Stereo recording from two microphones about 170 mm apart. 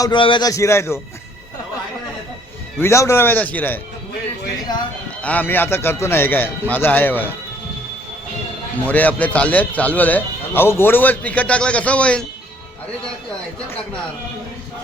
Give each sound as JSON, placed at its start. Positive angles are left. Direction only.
{"t": 0.0, "sound": "a man's voice", "side_deg": 30}
{"t": 2.7, "sound": "speech", "side_deg": 15}
{"t": 5.2, "sound": "speech", "side_deg": 10}
{"t": 8.9, "sound": "speech", "side_deg": 10}